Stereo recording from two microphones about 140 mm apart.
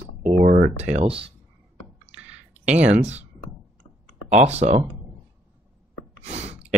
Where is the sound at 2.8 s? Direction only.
50° right (ahead or behind).